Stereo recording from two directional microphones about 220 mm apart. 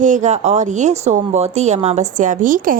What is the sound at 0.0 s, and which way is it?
A woman's voice, 35° right (ahead or behind).